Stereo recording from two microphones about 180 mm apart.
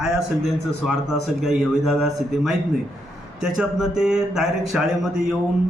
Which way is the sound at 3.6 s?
5° right (ahead or behind).